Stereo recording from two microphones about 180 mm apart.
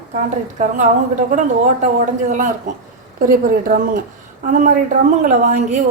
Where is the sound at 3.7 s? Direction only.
50° right (ahead or behind).